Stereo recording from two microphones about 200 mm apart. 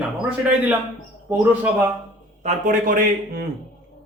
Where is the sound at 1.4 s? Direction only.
10° right (ahead or behind).